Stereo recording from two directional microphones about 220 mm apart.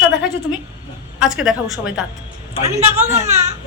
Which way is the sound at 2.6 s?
30° right (ahead or behind).